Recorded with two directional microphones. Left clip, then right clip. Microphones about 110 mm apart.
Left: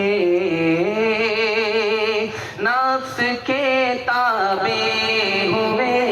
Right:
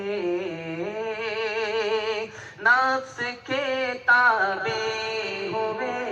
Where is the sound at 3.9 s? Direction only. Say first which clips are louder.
Even; 45° left (ahead or behind).